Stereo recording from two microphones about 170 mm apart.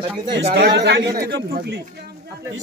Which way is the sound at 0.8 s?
90° right.